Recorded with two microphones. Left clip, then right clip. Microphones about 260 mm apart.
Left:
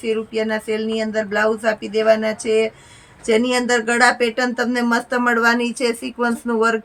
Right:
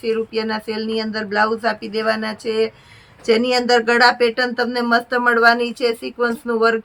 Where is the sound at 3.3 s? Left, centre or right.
Centre.